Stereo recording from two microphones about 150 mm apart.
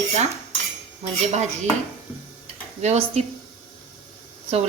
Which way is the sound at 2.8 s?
45° right (ahead or behind).